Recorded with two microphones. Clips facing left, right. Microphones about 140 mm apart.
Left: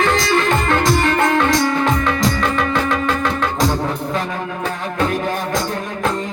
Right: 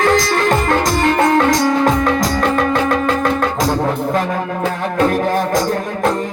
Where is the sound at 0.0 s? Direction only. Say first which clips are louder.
Right 2 dB; 45° right (ahead or behind).